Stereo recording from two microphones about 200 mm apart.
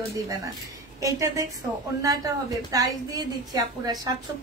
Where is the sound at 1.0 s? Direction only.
15° right (ahead or behind).